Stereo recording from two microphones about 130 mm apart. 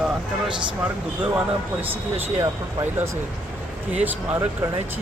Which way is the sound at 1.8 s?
15° right (ahead or behind).